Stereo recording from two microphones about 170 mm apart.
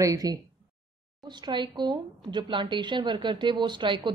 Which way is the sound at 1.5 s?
25° right (ahead or behind).